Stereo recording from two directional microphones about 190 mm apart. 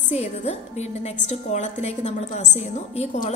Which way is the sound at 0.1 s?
35° left (ahead or behind).